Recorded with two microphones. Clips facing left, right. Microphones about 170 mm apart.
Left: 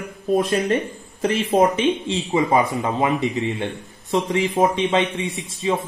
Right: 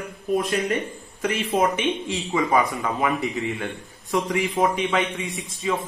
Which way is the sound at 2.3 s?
20° left (ahead or behind).